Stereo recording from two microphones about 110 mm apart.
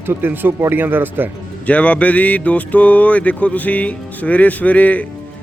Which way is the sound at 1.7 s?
10° left (ahead or behind).